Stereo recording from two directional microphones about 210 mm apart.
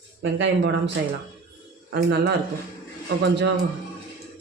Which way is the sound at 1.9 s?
50° right (ahead or behind).